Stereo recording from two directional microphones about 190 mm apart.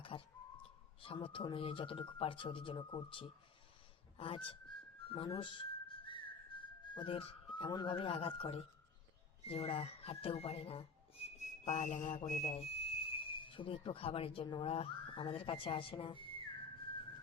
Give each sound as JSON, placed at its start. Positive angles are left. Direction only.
{"t": 0.0, "sound": "bird", "side_deg": 30}
{"t": 1.0, "sound": "speech", "side_deg": 25}
{"t": 5.0, "sound": "whistling", "side_deg": 30}
{"t": 9.4, "sound": "speech", "side_deg": 30}